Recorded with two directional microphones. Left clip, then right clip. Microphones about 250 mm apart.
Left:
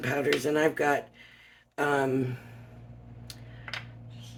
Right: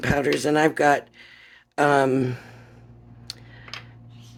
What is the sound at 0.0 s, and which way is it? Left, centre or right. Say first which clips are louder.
Speech: right 5 dB; right.